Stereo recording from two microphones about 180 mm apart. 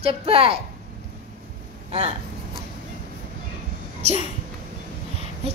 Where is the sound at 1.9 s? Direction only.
35° right (ahead or behind).